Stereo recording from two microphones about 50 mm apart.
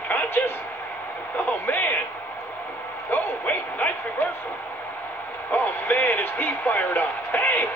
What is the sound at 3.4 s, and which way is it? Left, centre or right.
Speech, left.